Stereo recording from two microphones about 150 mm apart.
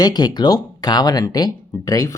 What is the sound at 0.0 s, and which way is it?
Speech, 25° left (ahead or behind).